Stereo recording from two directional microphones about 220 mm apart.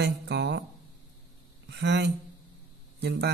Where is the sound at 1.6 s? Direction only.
50° right (ahead or behind).